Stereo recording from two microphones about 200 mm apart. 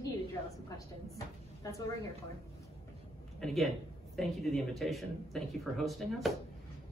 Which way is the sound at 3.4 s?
Centre (ahead or behind).